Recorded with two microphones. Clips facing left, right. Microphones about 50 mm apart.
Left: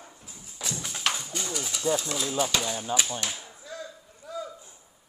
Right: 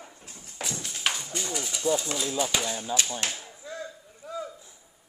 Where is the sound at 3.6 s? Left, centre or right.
Right.